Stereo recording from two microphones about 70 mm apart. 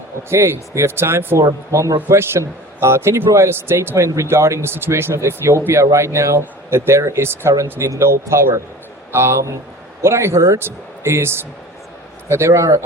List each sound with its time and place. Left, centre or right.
0.3 s speech: right
1.4 s speech: right
2.0 s speech: right
7.5 s speech: right